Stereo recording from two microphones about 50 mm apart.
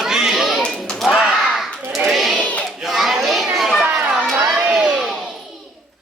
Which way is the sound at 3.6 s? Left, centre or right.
Centre.